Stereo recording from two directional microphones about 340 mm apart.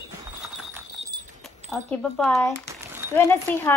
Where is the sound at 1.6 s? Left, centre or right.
Centre.